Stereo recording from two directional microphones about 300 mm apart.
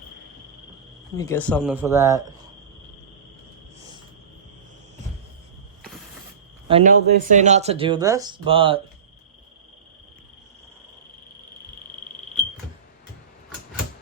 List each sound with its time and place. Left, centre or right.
1.1 s speech: centre
6.7 s speech: right